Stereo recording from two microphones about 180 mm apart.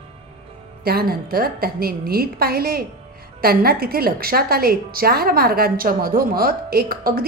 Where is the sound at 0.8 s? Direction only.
60° right (ahead or behind).